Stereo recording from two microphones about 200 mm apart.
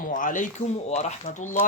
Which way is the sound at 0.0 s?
40° left (ahead or behind).